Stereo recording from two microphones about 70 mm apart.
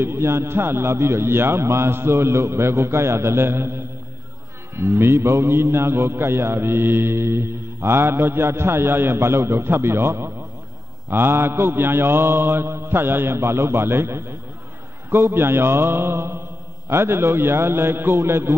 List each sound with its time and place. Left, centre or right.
0.0 s a man's voice: right